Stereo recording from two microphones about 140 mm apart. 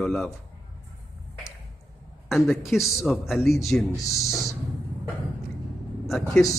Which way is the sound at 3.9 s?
25° left (ahead or behind).